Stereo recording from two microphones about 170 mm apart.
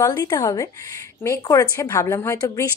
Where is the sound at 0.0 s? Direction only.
20° left (ahead or behind).